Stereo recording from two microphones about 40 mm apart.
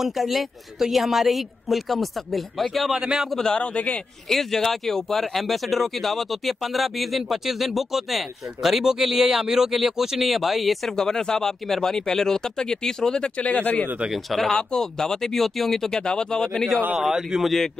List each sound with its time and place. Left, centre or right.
0.0 s a man's voice: centre
3.3 s speech: centre
3.5 s speech: left
4.3 s speech: centre
11.0 s speech: centre
13.4 s speech: left
14.1 s speech: centre
14.6 s speech: centre
17.4 s speech: centre